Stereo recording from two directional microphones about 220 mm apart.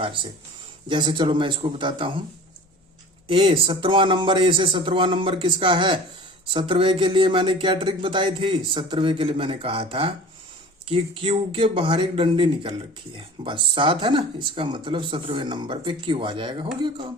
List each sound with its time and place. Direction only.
0.0 s speech: 25° right (ahead or behind)
3.2 s speech: 25° right (ahead or behind)